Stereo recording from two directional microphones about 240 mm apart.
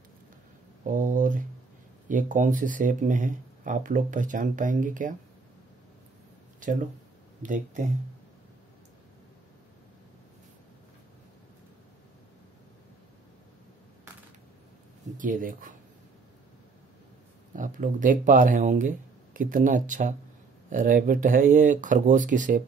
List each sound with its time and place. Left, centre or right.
0.8 s a sound: right
2.0 s speech: right
7.4 s speech: right
15.1 s speech: right
17.6 s speech: right